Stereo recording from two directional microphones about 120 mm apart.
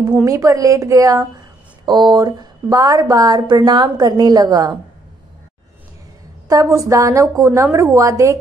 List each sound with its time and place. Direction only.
0.2 s a woman's voice: 30° right (ahead or behind)
6.5 s a woman's voice: 30° right (ahead or behind)